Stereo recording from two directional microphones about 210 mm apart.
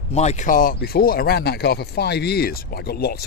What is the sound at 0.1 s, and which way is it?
Speech, 30° left (ahead or behind).